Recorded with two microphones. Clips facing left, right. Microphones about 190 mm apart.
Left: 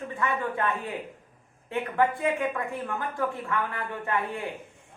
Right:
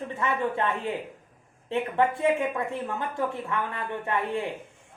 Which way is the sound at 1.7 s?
25° right (ahead or behind).